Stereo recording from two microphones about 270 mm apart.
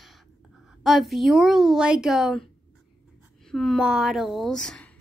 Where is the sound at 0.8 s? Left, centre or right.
Centre.